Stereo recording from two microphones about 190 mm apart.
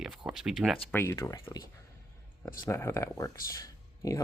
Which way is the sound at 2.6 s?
15° left (ahead or behind).